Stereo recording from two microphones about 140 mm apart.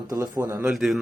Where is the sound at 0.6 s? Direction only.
Centre (ahead or behind).